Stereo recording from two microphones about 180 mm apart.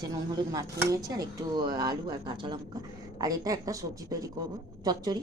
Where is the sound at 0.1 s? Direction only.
20° right (ahead or behind).